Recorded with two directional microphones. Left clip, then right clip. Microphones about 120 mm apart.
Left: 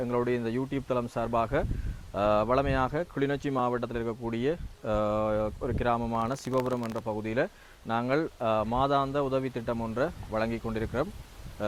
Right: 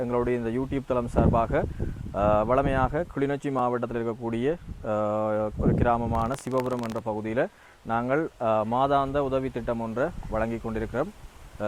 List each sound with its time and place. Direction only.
0.0 s speech: 15° right (ahead or behind)
4.9 s speech: 5° right (ahead or behind)
6.1 s speech: 5° right (ahead or behind)
7.0 s speech: 15° right (ahead or behind)